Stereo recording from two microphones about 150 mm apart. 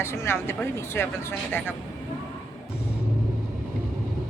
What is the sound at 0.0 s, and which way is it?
Speech, 15° left (ahead or behind).